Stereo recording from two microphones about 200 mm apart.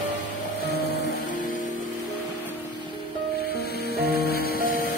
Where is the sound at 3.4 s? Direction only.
50° left (ahead or behind).